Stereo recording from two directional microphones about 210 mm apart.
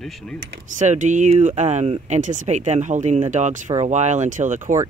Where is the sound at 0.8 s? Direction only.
35° right (ahead or behind).